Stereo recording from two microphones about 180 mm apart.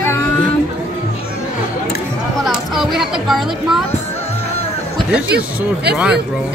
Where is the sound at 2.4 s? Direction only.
Centre (ahead or behind).